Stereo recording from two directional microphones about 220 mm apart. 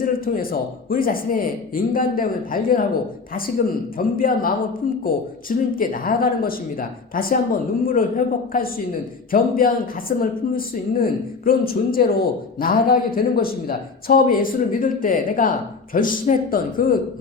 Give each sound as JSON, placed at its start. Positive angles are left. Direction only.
{"t": 0.3, "sound": "speech", "side_deg": 35}
{"t": 3.9, "sound": "speech", "side_deg": 40}